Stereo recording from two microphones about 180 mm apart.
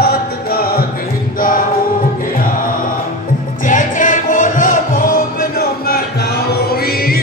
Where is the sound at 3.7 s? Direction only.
45° left (ahead or behind).